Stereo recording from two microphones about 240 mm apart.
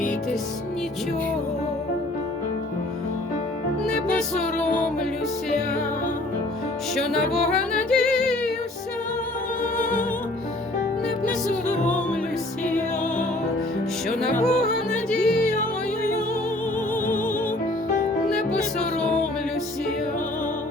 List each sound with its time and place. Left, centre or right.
3.8 s music: centre
4.5 s music: left
6.9 s music: centre
9.7 s music: left
14.4 s music: centre
18.3 s music: centre